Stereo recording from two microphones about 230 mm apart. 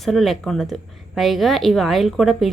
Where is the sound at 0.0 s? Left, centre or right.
Centre.